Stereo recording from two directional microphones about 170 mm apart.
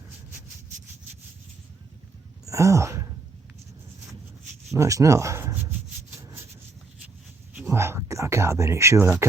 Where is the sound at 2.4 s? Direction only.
20° right (ahead or behind).